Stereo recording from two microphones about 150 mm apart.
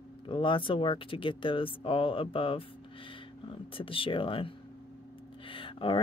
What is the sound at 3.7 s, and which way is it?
Speech, 35° left (ahead or behind).